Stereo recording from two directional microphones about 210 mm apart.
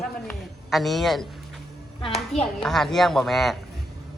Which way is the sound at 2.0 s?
30° left (ahead or behind).